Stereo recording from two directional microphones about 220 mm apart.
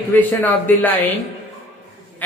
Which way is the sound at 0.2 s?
10° left (ahead or behind).